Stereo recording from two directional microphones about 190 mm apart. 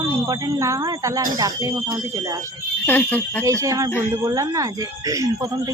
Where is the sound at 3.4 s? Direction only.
15° right (ahead or behind).